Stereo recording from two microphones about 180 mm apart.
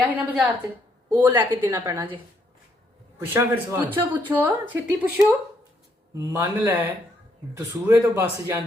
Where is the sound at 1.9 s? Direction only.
25° right (ahead or behind).